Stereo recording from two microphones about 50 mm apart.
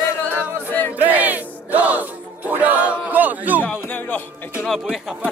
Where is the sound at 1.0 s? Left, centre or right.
Right.